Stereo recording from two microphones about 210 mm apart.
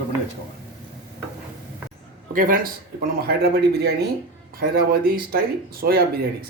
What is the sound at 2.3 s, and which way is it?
Speech, 40° right (ahead or behind).